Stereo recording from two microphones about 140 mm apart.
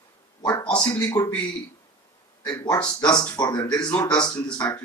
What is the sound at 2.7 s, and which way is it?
Speech, 30° left (ahead or behind).